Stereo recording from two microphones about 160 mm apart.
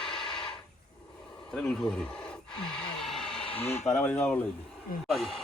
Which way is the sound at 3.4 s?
35° left (ahead or behind).